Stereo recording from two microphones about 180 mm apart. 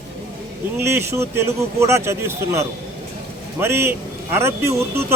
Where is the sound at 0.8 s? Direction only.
15° right (ahead or behind).